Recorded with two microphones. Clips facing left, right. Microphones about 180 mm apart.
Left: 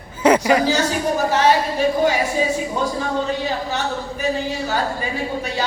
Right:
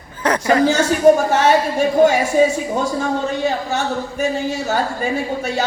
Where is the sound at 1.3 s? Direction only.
50° right (ahead or behind).